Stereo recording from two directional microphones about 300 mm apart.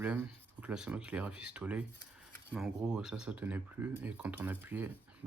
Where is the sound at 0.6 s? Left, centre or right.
Centre.